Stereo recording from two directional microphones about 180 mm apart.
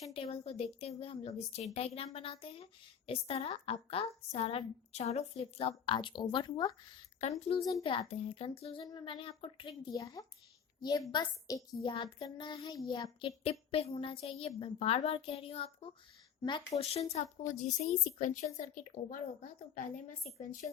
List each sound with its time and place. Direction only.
0.1 s a woman's voice: 30° left (ahead or behind)
7.2 s a woman's voice: 35° left (ahead or behind)
7.6 s child singing: 20° left (ahead or behind)
16.7 s a woman's voice: 35° left (ahead or behind)
20.2 s a woman's voice: 40° left (ahead or behind)